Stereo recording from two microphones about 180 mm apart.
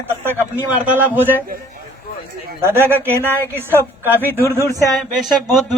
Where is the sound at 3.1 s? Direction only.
15° left (ahead or behind).